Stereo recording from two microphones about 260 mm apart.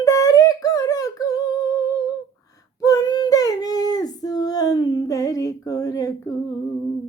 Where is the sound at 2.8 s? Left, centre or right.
Centre.